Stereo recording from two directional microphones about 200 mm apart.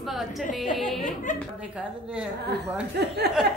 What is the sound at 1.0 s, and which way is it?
Speech, 40° left (ahead or behind).